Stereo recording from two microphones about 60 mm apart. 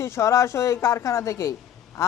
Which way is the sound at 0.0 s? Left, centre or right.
Left.